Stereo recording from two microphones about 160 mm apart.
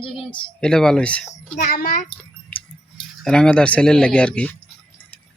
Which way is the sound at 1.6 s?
70° left (ahead or behind).